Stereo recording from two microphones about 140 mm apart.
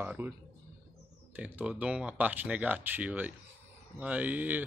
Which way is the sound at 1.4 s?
10° right (ahead or behind).